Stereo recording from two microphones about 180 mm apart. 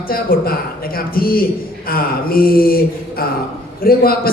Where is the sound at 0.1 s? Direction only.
55° left (ahead or behind).